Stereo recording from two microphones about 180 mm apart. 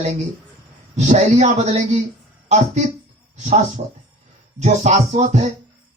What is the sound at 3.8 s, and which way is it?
Speech, 45° right (ahead or behind).